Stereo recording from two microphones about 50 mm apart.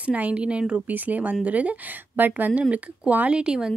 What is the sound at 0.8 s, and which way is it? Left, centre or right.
Speech, right.